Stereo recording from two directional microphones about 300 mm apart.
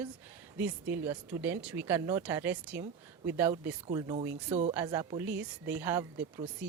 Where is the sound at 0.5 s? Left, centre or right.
Centre.